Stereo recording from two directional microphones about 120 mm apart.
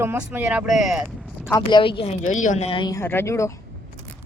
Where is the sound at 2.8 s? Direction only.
25° left (ahead or behind).